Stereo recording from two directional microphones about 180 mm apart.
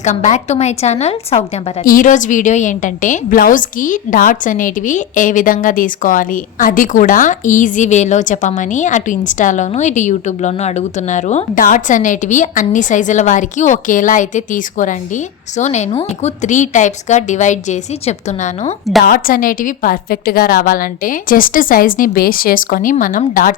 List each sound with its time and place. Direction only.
0.0 s a woman's voice: 40° left (ahead or behind)
1.8 s a woman's voice: 50° left (ahead or behind)
19.0 s a woman's voice: 50° left (ahead or behind)